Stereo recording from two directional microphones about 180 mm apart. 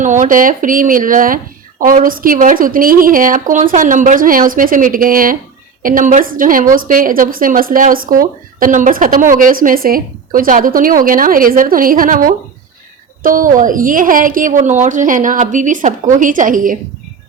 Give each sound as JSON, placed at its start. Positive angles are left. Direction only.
{"t": 0.0, "sound": "a woman's voice", "side_deg": -45}